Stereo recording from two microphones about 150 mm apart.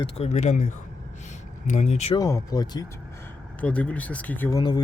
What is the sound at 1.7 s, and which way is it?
Speech, 50° left (ahead or behind).